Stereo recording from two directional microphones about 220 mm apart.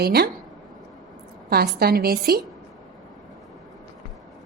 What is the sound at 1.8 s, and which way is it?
Speech, 45° right (ahead or behind).